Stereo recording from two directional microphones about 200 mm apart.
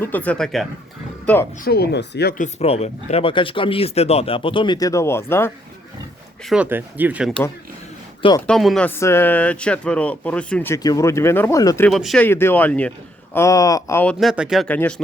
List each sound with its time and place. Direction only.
0.0 s speech: 10° left (ahead or behind)
1.5 s speech: 50° left (ahead or behind)
2.4 s speech: 30° left (ahead or behind); by 5.5 s 10° left (ahead or behind)
6.4 s speech: 5° right (ahead or behind)
8.4 s speech: 5° left (ahead or behind)
11.9 s speech: centre (ahead or behind)